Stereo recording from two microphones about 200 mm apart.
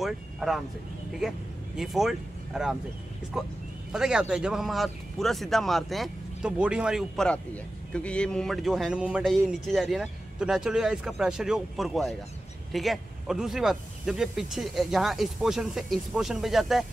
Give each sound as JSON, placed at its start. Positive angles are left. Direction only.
{"t": 0.0, "sound": "speech", "side_deg": 0}
{"t": 1.8, "sound": "speech", "side_deg": 0}